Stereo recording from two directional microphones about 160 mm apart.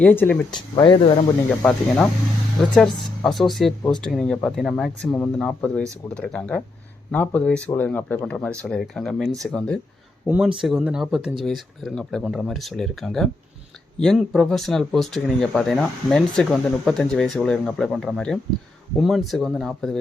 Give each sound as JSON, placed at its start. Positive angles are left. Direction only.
{"t": 0.0, "sound": "speech", "side_deg": 10}
{"t": 0.5, "sound": "speech", "side_deg": 30}
{"t": 1.5, "sound": "speech", "side_deg": 5}
{"t": 10.2, "sound": "speech", "side_deg": -10}